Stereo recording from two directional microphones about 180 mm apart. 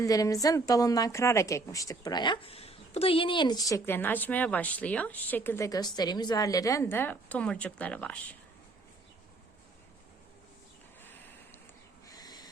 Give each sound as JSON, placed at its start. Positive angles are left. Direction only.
{"t": 0.0, "sound": "a woman's voice", "side_deg": 20}
{"t": 12.0, "sound": "owl", "side_deg": 20}